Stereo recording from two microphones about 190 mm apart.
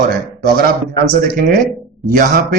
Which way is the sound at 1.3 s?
45° right (ahead or behind).